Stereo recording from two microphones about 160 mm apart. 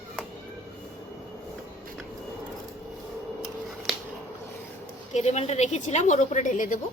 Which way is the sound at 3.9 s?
Centre (ahead or behind).